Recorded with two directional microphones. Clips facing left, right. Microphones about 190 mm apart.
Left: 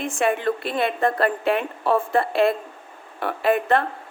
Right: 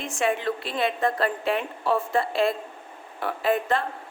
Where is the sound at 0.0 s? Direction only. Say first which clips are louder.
Left 3 dB; 55° left (ahead or behind).